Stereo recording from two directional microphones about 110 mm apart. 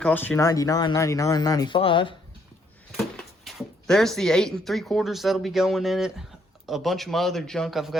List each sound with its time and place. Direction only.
0.0 s speech: 15° left (ahead or behind)
0.3 s speech: 30° left (ahead or behind)
1.7 s speech: 50° left (ahead or behind)
2.9 s a man's voice: 5° left (ahead or behind)